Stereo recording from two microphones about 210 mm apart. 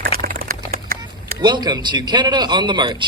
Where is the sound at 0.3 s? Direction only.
45° right (ahead or behind).